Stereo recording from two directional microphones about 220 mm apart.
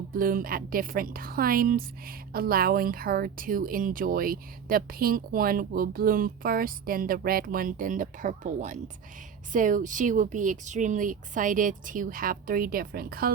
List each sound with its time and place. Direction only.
0.1 s a woman's voice: 40° right (ahead or behind)